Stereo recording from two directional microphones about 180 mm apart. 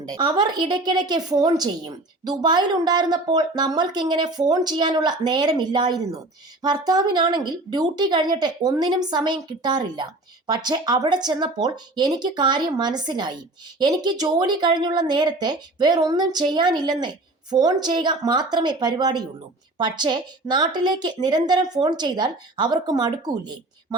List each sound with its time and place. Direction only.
0.1 s a woman's voice: 25° right (ahead or behind)